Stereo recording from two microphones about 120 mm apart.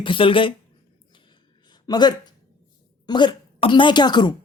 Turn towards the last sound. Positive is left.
turn(degrees=35)  # may be behind; listen again after turning